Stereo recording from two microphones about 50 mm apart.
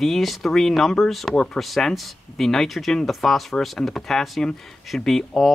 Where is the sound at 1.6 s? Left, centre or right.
Centre.